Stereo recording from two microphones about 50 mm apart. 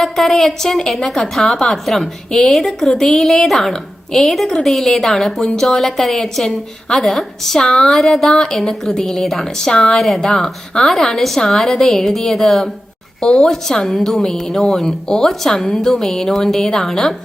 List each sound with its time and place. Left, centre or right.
0.0 s a woman's voice: centre